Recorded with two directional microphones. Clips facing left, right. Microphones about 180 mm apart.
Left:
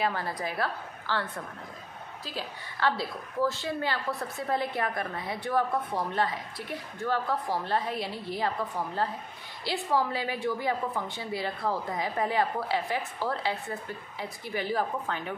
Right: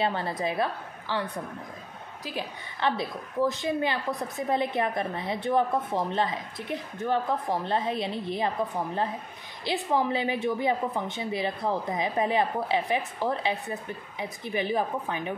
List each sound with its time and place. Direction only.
0.0 s a woman's voice: 25° right (ahead or behind)